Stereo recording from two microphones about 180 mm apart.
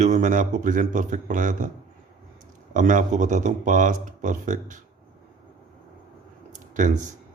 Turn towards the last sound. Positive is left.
turn(degrees=-45)  # may be behind; listen again after turning